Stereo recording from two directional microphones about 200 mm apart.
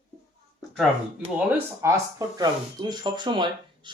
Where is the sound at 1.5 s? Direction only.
15° right (ahead or behind).